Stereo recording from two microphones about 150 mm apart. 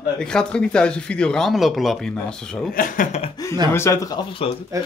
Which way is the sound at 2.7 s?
65° left (ahead or behind).